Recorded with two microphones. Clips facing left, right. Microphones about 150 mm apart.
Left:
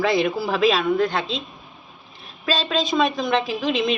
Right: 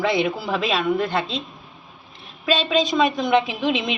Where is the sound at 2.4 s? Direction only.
Centre (ahead or behind).